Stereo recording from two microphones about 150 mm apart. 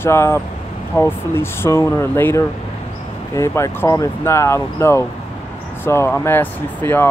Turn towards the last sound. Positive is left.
turn(degrees=15)  # may be behind; listen again after turning